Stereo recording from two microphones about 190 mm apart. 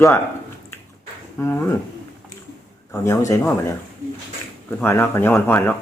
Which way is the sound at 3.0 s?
15° left (ahead or behind).